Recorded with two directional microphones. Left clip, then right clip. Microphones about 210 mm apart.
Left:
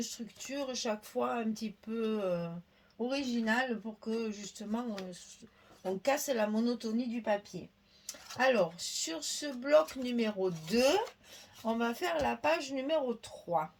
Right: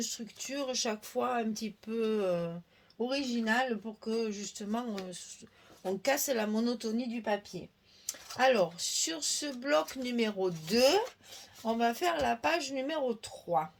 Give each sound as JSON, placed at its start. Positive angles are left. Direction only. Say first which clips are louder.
{"t": 0.0, "sound": "speech", "louder": "right 3 dB", "side_deg": -40}
{"t": 6.0, "sound": "speech", "louder": "even", "side_deg": -40}